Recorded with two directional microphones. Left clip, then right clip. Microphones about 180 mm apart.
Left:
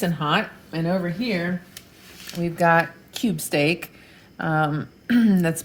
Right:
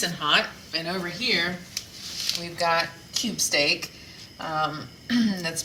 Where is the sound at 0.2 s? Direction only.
55° left (ahead or behind).